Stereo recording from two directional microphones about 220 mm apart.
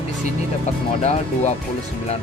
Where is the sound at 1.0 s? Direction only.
30° left (ahead or behind).